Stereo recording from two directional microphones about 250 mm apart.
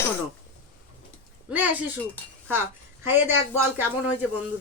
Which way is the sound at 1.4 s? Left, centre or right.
Centre.